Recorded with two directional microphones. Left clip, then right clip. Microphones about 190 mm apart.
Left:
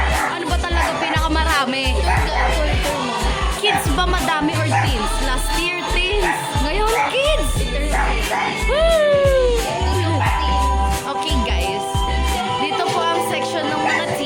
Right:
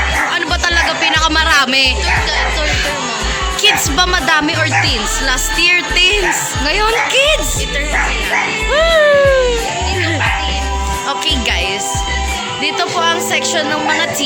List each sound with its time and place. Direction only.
1.0 s music: centre (ahead or behind)
3.6 s speech: 10° right (ahead or behind)
5.5 s speech: 15° right (ahead or behind)
8.7 s speech: 10° right (ahead or behind)
13.0 s speech: 30° right (ahead or behind)